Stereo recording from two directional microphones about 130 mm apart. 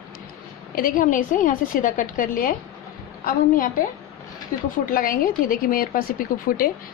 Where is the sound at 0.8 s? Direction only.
90° left.